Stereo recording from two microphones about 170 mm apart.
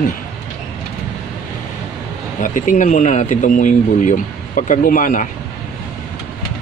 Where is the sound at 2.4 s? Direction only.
50° left (ahead or behind).